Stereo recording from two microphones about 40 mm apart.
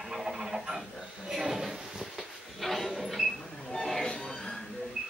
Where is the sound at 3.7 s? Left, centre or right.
Centre.